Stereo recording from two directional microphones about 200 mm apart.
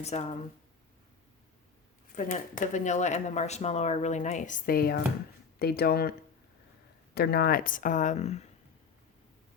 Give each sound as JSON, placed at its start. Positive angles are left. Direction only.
{"t": 0.0, "sound": "speech", "side_deg": 35}
{"t": 2.1, "sound": "speech", "side_deg": 45}